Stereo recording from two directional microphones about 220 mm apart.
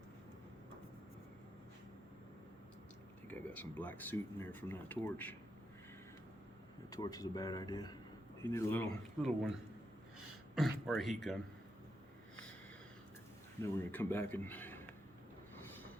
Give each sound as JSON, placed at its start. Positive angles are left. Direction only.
{"t": 3.2, "sound": "speech", "side_deg": 5}
{"t": 6.9, "sound": "speech", "side_deg": 15}
{"t": 10.5, "sound": "speech", "side_deg": 0}
{"t": 13.6, "sound": "speech", "side_deg": 10}